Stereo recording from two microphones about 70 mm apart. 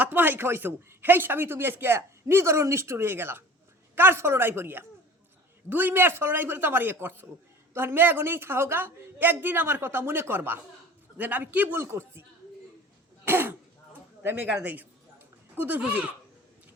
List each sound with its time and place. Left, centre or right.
0.0 s speech: right
13.2 s speech: right
14.4 s speech: centre